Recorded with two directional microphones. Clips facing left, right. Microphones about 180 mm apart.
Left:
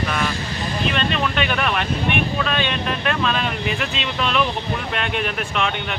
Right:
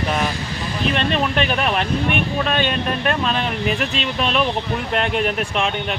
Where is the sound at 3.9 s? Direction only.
40° right (ahead or behind).